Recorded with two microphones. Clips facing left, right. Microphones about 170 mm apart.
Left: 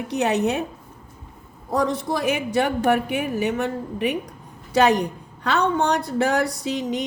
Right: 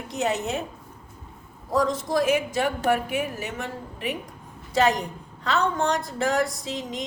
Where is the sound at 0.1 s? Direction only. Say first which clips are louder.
Left 5 dB; 65° left (ahead or behind).